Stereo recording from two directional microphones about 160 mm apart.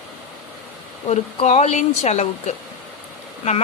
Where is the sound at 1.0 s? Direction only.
40° left (ahead or behind).